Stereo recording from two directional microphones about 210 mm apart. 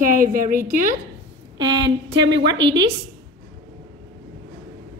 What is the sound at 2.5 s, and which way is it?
Speech, 60° right (ahead or behind).